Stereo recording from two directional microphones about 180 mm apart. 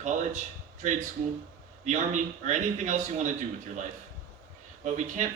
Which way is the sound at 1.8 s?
40° right (ahead or behind).